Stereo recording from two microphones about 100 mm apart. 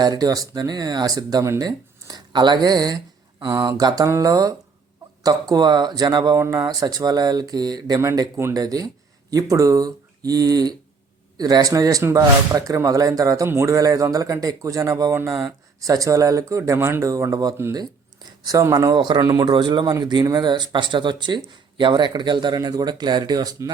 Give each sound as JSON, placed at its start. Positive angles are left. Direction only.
{"t": 0.0, "sound": "speech", "side_deg": -40}
{"t": 6.3, "sound": "speech", "side_deg": -30}
{"t": 18.9, "sound": "speech", "side_deg": -45}